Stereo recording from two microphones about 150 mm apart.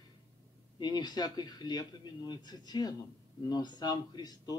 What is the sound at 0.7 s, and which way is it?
Speech, 30° left (ahead or behind).